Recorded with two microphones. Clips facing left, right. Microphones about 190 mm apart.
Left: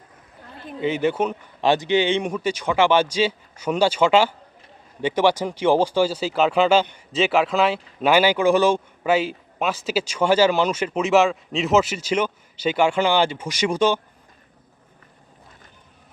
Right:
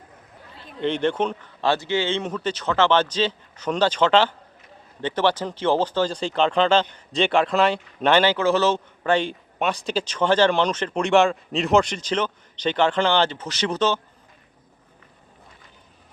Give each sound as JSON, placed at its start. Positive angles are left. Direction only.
{"t": 0.8, "sound": "speech", "side_deg": 5}